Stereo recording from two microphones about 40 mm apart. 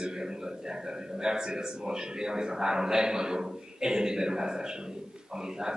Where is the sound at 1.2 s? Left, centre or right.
Centre.